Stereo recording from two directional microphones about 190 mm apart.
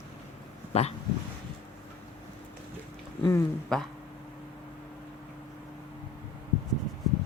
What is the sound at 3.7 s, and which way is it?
Speech, 5° left (ahead or behind).